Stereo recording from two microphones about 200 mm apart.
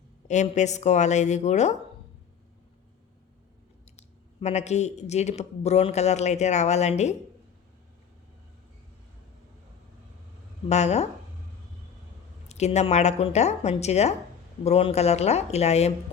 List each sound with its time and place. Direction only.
0.3 s speech: 35° left (ahead or behind)
3.9 s speech: 35° left (ahead or behind)
10.7 s speech: 35° left (ahead or behind)
12.5 s speech: 35° left (ahead or behind)